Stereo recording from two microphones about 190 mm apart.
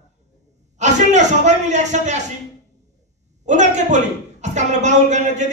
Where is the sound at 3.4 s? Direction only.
40° right (ahead or behind).